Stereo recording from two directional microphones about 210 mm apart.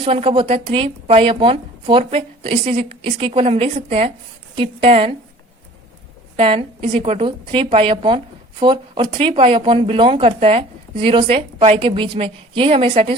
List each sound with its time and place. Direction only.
0.0 s a woman's voice: 25° right (ahead or behind)
6.3 s a woman's voice: 25° right (ahead or behind)